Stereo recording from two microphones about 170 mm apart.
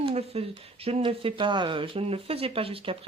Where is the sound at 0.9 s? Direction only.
35° right (ahead or behind).